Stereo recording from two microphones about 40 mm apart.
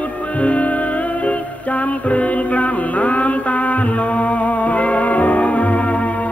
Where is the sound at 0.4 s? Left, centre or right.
Left.